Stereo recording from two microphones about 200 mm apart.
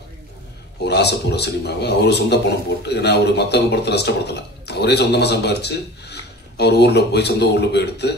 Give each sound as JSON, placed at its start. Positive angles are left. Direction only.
{"t": 0.8, "sound": "a man's voice", "side_deg": 55}